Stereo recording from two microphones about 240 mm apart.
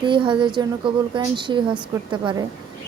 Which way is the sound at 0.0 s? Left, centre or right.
Centre.